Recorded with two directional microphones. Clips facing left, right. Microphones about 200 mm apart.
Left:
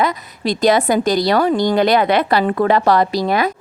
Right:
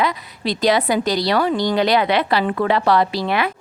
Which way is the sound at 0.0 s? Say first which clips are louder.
Left 3 dB; 45° left (ahead or behind).